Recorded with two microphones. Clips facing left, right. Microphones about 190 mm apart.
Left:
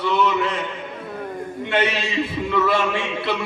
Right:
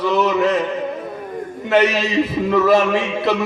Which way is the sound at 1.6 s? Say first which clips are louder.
Right 7 dB; 40° right (ahead or behind).